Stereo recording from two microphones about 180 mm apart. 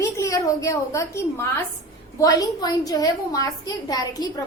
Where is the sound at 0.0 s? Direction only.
15° left (ahead or behind).